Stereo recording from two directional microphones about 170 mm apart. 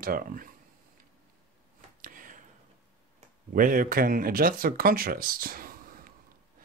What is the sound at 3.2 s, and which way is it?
Speech, 50° right (ahead or behind).